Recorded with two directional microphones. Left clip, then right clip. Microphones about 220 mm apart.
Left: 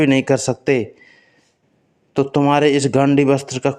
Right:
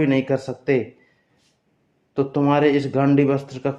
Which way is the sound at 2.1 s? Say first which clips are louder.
Left 4 dB; 40° left (ahead or behind).